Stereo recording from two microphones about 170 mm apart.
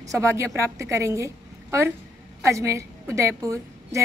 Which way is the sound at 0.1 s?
15° right (ahead or behind).